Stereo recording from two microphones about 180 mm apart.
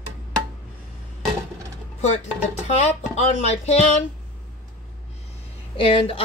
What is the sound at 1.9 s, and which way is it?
Speech, 35° left (ahead or behind).